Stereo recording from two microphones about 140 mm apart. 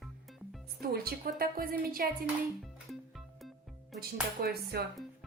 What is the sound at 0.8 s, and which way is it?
A woman's voice, 90° right.